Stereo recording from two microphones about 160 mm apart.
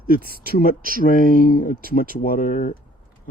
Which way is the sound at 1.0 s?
60° left (ahead or behind).